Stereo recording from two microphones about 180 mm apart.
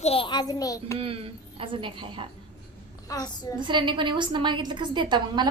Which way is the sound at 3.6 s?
25° right (ahead or behind).